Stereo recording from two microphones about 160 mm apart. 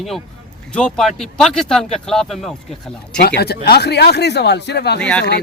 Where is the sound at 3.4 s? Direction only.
80° left.